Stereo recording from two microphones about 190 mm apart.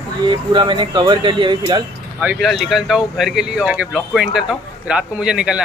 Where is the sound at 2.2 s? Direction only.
5° right (ahead or behind).